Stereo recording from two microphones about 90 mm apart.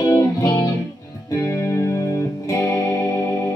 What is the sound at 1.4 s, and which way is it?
Music, 30° left (ahead or behind).